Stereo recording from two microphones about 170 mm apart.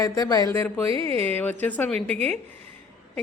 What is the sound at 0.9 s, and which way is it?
Speech, 35° right (ahead or behind).